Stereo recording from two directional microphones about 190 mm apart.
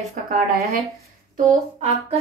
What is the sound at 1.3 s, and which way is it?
Speech, 40° right (ahead or behind).